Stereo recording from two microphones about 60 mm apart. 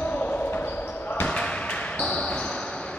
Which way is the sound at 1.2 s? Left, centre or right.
Centre.